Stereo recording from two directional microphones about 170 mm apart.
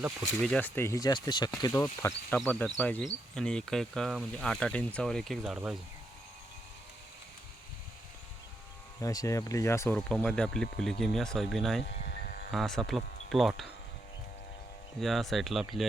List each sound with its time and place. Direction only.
0.2 s speech: 5° left (ahead or behind); by 1.5 s 25° left (ahead or behind)
1.5 s speech: 15° left (ahead or behind); by 5.7 s 5° right (ahead or behind)
9.0 s speech: 20° left (ahead or behind)
10.2 s speech: 5° left (ahead or behind)
12.0 s a sound: 65° left (ahead or behind)
12.5 s speech: centre (ahead or behind)
15.0 s speech: centre (ahead or behind)